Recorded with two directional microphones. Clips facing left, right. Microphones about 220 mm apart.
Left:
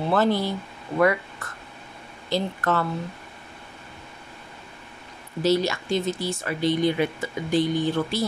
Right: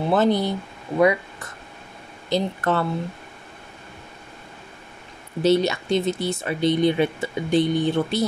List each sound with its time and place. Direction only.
0.1 s speech: 20° right (ahead or behind)
5.4 s speech: 25° right (ahead or behind)